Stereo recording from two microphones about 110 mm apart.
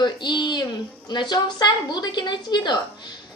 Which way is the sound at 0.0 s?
45° left (ahead or behind).